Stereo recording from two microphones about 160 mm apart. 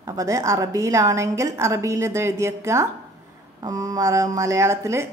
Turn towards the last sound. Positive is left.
turn(degrees=-15)  # may be behind; listen again after turning